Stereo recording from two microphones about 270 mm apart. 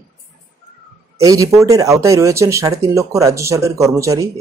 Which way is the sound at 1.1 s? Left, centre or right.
Centre.